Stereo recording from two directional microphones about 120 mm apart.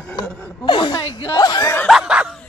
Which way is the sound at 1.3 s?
30° left (ahead or behind).